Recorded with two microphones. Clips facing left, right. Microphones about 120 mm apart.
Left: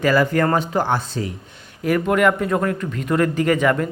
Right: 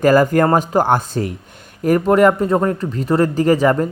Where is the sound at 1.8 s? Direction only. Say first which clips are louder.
Right 5 dB; 40° right (ahead or behind).